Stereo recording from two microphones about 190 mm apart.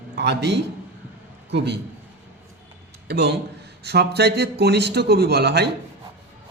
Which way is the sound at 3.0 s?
55° right (ahead or behind).